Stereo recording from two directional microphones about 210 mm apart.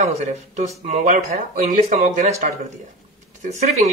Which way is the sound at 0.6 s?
35° right (ahead or behind).